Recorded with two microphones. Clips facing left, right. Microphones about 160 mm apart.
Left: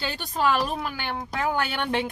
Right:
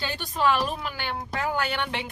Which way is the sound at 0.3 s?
45° left (ahead or behind).